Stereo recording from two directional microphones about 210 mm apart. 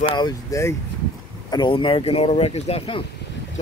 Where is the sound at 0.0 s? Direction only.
20° left (ahead or behind).